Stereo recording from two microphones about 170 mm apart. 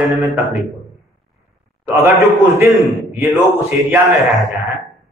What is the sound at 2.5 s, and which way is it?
Speech, 15° right (ahead or behind).